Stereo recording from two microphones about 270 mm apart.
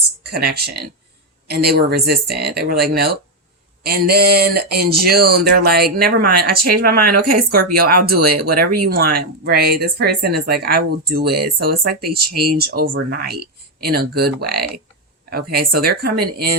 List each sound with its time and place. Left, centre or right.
0.2 s speech: right